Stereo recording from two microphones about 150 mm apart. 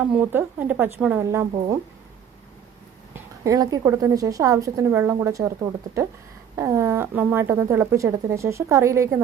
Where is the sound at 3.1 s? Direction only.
20° right (ahead or behind).